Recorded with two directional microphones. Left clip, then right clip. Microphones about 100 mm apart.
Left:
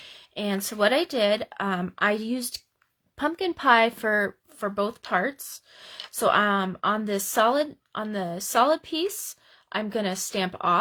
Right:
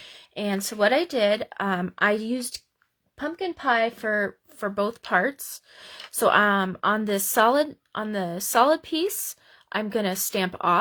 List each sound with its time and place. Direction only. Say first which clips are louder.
0.0 s speech: right 1 dB; 30° right (ahead or behind)
3.2 s a woman's voice: left 3 dB; 15° left (ahead or behind)
4.0 s a woman's voice: left 1 dB; 5° right (ahead or behind)
4.6 s speech: right 1 dB; 25° right (ahead or behind)